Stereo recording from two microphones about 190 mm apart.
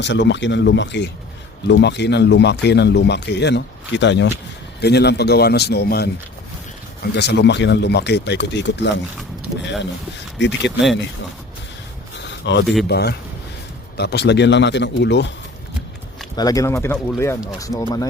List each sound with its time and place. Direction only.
0.0 s speech: 70° left (ahead or behind)
10.2 s speech: 70° left (ahead or behind)
12.1 s a sound: 65° left (ahead or behind)
12.9 s speech: 60° left (ahead or behind)
16.3 s speech: 20° left (ahead or behind)